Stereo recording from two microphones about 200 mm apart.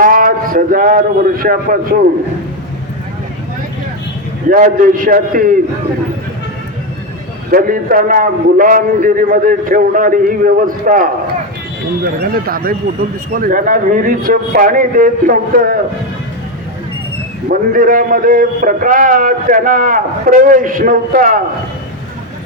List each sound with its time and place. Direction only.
0.0 s a man's voice: 45° right (ahead or behind)
4.4 s a man's voice: 45° right (ahead or behind)
7.5 s a man's voice: 45° right (ahead or behind)
12.2 s a man's voice: 50° right (ahead or behind)
17.5 s a man's voice: 45° right (ahead or behind)